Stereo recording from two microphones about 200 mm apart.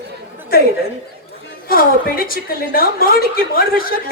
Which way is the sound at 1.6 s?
45° left (ahead or behind).